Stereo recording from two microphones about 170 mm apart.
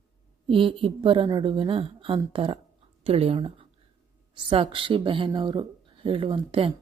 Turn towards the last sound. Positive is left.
turn(degrees=-30)  # may be behind; listen again after turning